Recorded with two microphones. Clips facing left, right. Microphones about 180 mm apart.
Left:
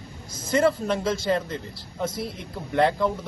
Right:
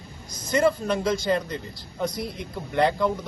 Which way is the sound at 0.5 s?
5° left (ahead or behind).